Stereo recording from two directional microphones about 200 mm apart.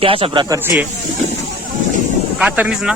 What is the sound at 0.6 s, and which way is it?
Speech, 10° right (ahead or behind).